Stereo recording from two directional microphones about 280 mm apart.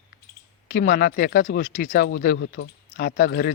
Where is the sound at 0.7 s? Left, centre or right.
Left.